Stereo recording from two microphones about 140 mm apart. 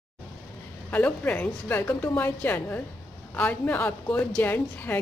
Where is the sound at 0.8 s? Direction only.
10° left (ahead or behind).